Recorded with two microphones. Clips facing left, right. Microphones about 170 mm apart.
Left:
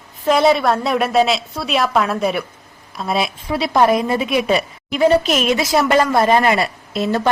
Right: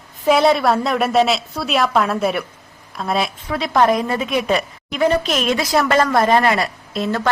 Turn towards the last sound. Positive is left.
turn(degrees=10)  # may be behind; listen again after turning